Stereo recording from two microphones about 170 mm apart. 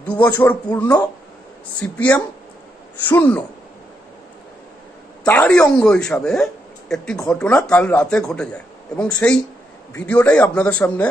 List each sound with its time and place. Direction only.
0.0 s a man's voice: 10° left (ahead or behind)
5.2 s a man's voice: 10° left (ahead or behind)